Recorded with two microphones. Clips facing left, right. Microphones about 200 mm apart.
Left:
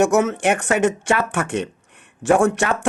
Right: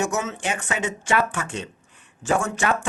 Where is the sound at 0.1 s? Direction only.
60° left (ahead or behind).